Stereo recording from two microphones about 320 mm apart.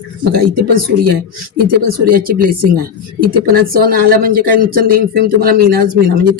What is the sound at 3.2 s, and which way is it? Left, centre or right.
Speech, right.